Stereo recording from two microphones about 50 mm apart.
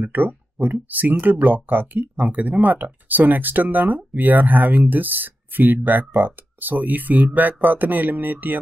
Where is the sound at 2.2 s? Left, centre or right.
Right.